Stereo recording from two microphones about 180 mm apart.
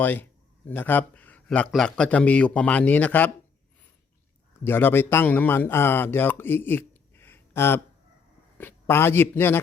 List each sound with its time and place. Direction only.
0.0 s a man's voice: 10° left (ahead or behind)
4.6 s a man's voice: 10° left (ahead or behind)